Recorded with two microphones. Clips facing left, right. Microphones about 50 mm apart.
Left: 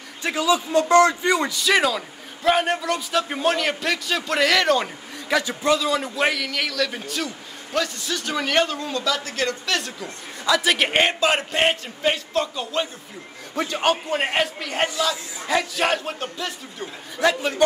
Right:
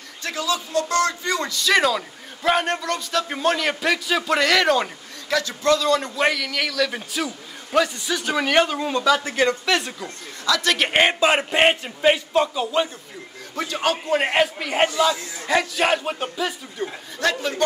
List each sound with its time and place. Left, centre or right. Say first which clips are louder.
0.2 s a man's voice: left 4 dB; centre
5.3 s a man's voice: even; centre
10.0 s speech: even; left
10.6 s a man's voice: left 1 dB; centre
10.9 s a man's voice: right 2 dB; centre
12.7 s a man's voice: right 3 dB; centre
13.6 s a man's voice: left 2 dB; centre
14.0 s a man's voice: right 3 dB; centre
17.2 s a man's voice: left 3 dB; centre